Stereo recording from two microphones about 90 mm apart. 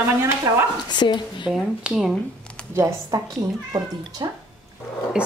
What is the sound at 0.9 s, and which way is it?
Speech, 55° left (ahead or behind).